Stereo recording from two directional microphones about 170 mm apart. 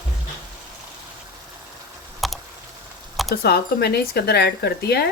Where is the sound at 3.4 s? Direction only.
70° left (ahead or behind).